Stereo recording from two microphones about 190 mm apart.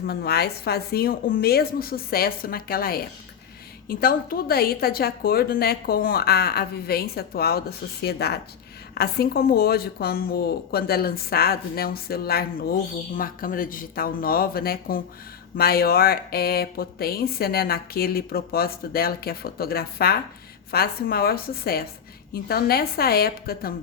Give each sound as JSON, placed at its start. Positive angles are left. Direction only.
{"t": 0.0, "sound": "a woman's voice", "side_deg": 55}